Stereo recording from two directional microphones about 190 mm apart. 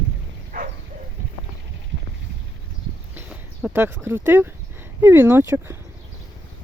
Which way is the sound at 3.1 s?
10° right (ahead or behind).